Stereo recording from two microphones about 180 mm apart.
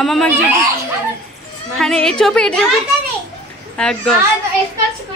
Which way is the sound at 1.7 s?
5° left (ahead or behind).